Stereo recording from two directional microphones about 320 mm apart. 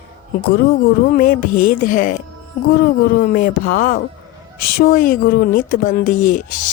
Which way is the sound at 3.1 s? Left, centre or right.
Left.